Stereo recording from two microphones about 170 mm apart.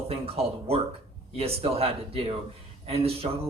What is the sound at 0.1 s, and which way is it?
Speech, 35° right (ahead or behind).